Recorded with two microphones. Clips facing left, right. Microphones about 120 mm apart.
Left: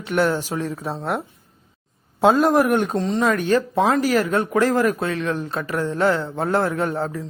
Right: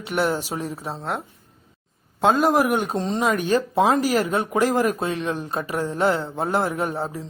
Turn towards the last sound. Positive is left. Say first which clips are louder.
# left 2 dB
turn(degrees=-15)  # may be behind; listen again after turning